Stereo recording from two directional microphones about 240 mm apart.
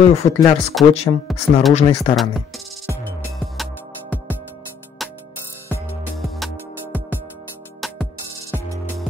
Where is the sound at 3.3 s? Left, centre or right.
Centre.